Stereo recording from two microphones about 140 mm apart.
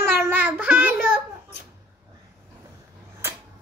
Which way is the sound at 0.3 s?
10° right (ahead or behind).